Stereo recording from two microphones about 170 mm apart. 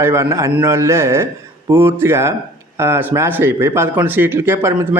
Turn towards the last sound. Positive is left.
turn(degrees=-15)  # may be behind; listen again after turning